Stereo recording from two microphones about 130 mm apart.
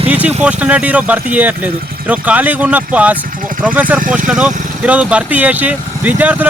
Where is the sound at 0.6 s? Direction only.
10° right (ahead or behind).